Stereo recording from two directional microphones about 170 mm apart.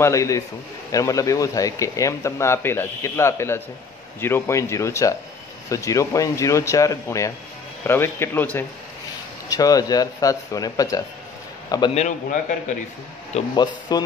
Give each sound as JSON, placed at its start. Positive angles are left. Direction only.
{"t": 0.0, "sound": "speech", "side_deg": 20}
{"t": 11.9, "sound": "a man's voice", "side_deg": 45}
{"t": 13.6, "sound": "speech", "side_deg": 25}